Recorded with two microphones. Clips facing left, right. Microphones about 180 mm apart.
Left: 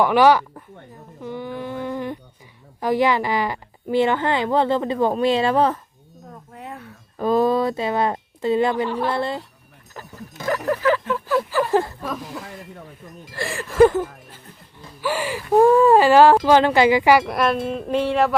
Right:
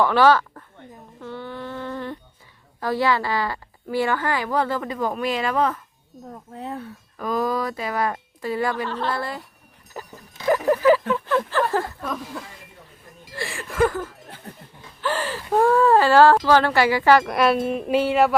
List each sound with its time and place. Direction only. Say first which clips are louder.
0.0 s speech: left 2 dB; 15° left (ahead or behind)
1.2 s music: left 4 dB; 15° left (ahead or behind)
2.8 s a woman's voice: left 3 dB; 15° left (ahead or behind)
6.5 s speech: right 5 dB; 30° right (ahead or behind)
7.2 s a woman's voice: left 6 dB; 30° left (ahead or behind)
10.7 s speech: right 3 dB; 15° right (ahead or behind)
11.1 s speech: left 1 dB; 5° left (ahead or behind)
13.3 s speech: left 6 dB; 45° left (ahead or behind)
13.8 s a woman's voice: left 7 dB; 20° left (ahead or behind)
15.0 s speech: left 2 dB; 10° left (ahead or behind)
17.3 s speech: right 1 dB; 5° right (ahead or behind)